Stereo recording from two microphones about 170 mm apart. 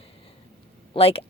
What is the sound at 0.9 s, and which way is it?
Speech, 35° left (ahead or behind).